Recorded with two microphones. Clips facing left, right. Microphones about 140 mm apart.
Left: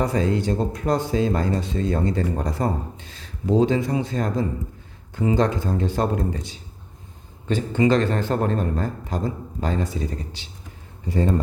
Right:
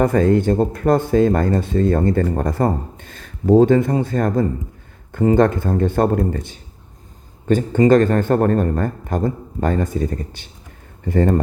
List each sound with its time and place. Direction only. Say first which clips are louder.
0.0 s speech: right 7 dB; 55° right (ahead or behind)